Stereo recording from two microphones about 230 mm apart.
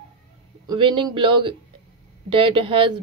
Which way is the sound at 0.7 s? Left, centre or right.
Right.